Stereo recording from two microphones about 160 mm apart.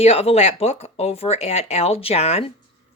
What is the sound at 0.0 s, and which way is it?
Speech, 40° left (ahead or behind).